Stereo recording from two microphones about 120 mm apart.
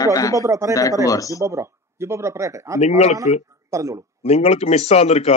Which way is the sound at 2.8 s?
70° left (ahead or behind).